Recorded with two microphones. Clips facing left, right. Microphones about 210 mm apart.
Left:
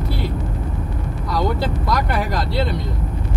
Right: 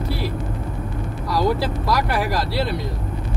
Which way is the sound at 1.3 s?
5° right (ahead or behind).